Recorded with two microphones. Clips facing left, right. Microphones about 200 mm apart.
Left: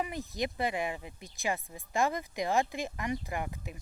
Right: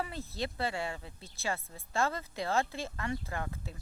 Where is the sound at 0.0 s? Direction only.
15° left (ahead or behind).